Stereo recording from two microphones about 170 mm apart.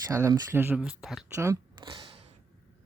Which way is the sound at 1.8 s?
30° right (ahead or behind).